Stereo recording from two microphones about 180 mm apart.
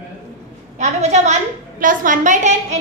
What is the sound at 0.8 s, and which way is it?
A woman's voice, 40° right (ahead or behind).